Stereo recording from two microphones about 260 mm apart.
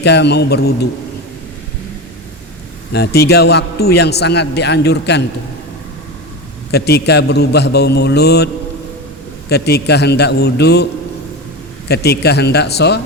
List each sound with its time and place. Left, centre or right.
0.0 s a man's voice: left
2.9 s a man's voice: left
6.7 s a man's voice: left
9.5 s a man's voice: left
11.9 s a man's voice: left